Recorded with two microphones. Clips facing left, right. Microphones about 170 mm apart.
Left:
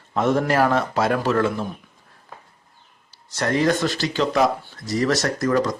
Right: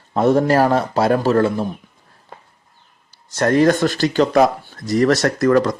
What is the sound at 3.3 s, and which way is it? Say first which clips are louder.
Speech: right 6 dB; 50° right (ahead or behind).